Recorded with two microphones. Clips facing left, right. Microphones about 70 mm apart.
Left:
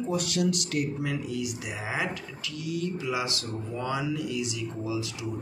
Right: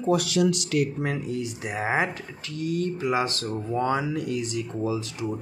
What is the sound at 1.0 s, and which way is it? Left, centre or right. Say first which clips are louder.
Speech: right 2 dB; right.